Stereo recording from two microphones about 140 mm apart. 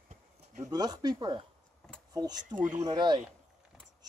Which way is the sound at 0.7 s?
30° right (ahead or behind).